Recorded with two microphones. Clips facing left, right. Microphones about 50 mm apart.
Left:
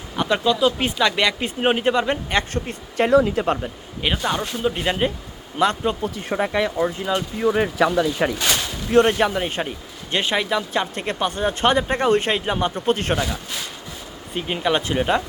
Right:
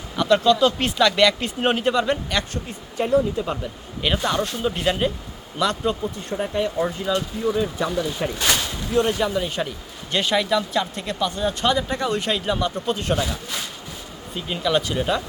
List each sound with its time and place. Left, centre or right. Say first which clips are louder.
0.2 s speech: right 2 dB; centre
2.5 s speech: left 4 dB; left
3.1 s speech: left 3 dB; left
3.4 s speech: left 5 dB; left
4.0 s speech: right 1 dB; centre
6.2 s speech: left 3 dB; left
7.0 s speech: left 2 dB; left
7.5 s speech: left 6 dB; left
8.2 s speech: left 5 dB; left
8.9 s a man's voice: left 5 dB; left
14.3 s a man's voice: left 1 dB; left